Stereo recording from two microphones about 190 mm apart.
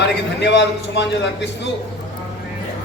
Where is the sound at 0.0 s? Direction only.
65° left (ahead or behind).